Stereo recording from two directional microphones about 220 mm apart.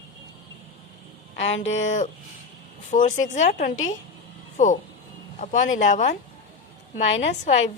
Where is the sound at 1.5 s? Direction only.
60° left (ahead or behind).